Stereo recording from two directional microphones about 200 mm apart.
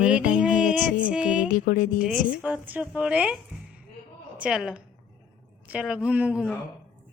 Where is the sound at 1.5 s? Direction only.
40° left (ahead or behind).